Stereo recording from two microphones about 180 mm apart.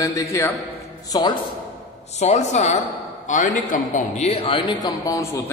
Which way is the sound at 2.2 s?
40° left (ahead or behind).